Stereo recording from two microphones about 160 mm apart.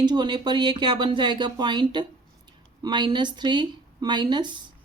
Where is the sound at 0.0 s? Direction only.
25° right (ahead or behind).